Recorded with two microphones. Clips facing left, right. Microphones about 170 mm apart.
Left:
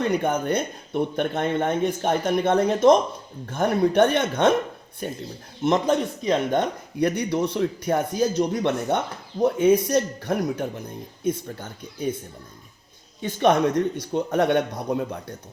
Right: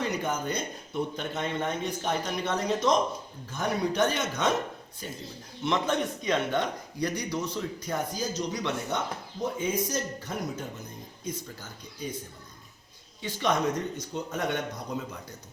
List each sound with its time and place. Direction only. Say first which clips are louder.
0.0 s speech: left 7 dB; 55° left (ahead or behind)
5.6 s a man's voice: left 7 dB; 40° left (ahead or behind)
6.6 s speech: left 7 dB; 60° left (ahead or behind)
9.4 s speech: left 11 dB; 65° left (ahead or behind)
13.2 s speech: left 8 dB; 60° left (ahead or behind)